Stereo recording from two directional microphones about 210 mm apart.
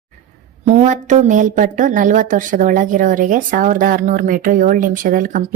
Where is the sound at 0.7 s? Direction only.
35° right (ahead or behind).